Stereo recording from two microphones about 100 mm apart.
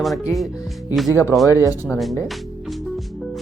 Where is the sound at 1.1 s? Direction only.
20° right (ahead or behind).